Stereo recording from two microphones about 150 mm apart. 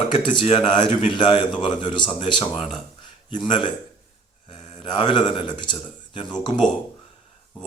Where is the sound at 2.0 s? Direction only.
30° left (ahead or behind).